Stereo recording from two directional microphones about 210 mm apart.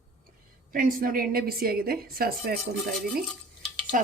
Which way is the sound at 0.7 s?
45° right (ahead or behind).